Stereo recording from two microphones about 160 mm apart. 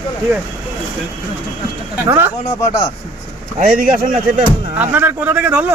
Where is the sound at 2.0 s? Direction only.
15° right (ahead or behind).